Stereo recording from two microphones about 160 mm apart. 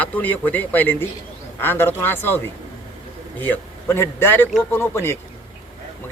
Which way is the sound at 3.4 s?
10° left (ahead or behind).